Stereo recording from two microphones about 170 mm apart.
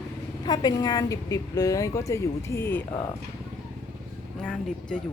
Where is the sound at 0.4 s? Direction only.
25° left (ahead or behind).